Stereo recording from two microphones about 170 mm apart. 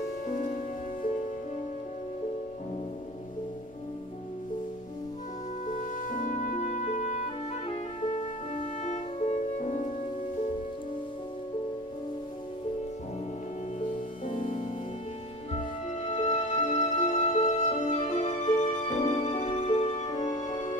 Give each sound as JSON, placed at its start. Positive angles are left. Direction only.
{"t": 5.7, "sound": "music", "side_deg": 50}
{"t": 8.8, "sound": "music", "side_deg": 45}
{"t": 13.7, "sound": "music", "side_deg": 45}